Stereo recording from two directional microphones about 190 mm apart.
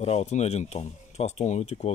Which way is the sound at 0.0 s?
35° left (ahead or behind).